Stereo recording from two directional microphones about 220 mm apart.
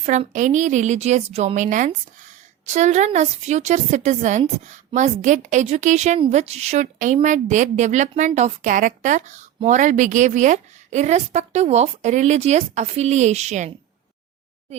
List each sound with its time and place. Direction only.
0.0 s a woman's voice: 35° right (ahead or behind)